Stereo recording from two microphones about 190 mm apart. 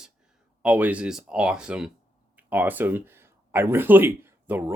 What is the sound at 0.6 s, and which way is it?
Speech, 5° right (ahead or behind).